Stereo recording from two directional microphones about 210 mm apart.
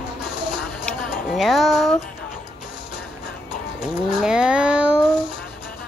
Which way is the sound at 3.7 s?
5° right (ahead or behind).